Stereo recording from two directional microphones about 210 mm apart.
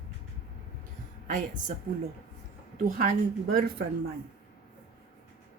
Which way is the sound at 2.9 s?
45° right (ahead or behind).